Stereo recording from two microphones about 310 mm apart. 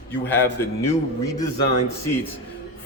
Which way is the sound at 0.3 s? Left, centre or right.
Centre.